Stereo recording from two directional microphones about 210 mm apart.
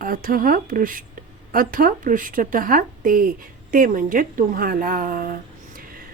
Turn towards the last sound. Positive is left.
turn(degrees=-45)  # may be behind; listen again after turning